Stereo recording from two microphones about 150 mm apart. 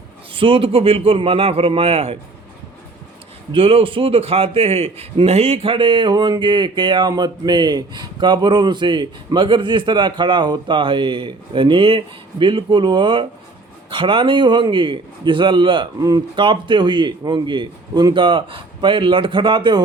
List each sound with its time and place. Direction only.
0.3 s a man's voice: 35° right (ahead or behind)
3.5 s a man's voice: 40° right (ahead or behind)